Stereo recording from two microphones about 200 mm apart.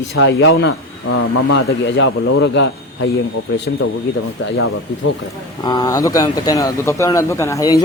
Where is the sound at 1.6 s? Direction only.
75° left (ahead or behind).